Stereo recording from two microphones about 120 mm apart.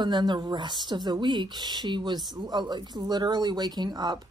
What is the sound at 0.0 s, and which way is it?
Speech, 40° right (ahead or behind).